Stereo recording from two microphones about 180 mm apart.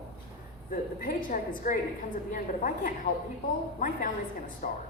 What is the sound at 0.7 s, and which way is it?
A woman's voice, 50° left (ahead or behind).